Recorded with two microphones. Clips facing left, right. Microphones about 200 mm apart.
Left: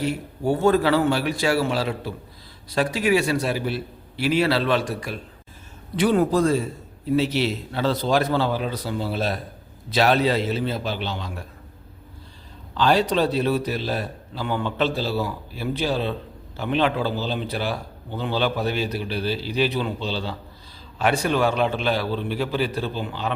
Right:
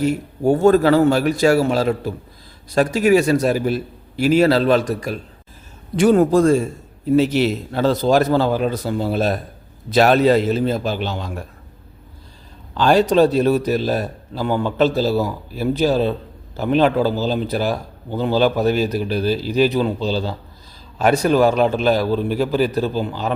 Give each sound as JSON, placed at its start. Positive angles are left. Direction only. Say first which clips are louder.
{"t": 0.0, "sound": "a man's voice", "louder": "right 6 dB", "side_deg": -45}
{"t": 12.7, "sound": "a man's voice", "louder": "right 6 dB", "side_deg": -45}